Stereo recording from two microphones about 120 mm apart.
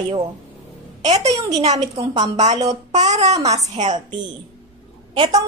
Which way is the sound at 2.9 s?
65° right (ahead or behind).